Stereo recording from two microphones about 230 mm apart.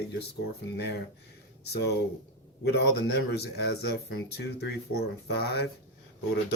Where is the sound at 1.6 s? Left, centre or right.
Left.